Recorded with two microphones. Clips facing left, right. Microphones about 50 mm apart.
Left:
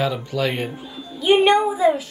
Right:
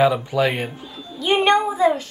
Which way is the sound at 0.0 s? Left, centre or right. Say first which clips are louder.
Right 5 dB; centre.